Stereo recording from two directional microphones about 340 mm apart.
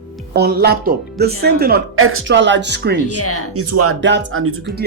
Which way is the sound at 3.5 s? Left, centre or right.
Right.